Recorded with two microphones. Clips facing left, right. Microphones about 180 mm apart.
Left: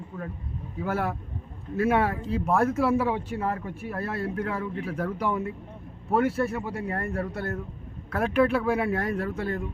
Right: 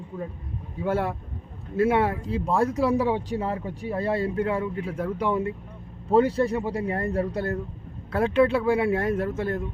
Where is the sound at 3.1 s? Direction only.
30° right (ahead or behind).